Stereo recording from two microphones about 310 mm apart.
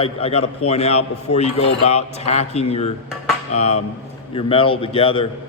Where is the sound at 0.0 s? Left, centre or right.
Centre.